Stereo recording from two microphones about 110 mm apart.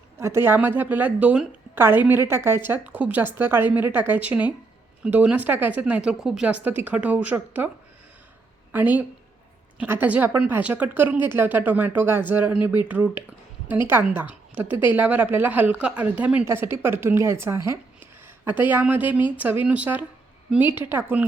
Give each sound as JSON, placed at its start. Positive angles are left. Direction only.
{"t": 0.2, "sound": "a woman's voice", "side_deg": -25}
{"t": 8.7, "sound": "a woman's voice", "side_deg": -15}
{"t": 16.5, "sound": "a woman's voice", "side_deg": -25}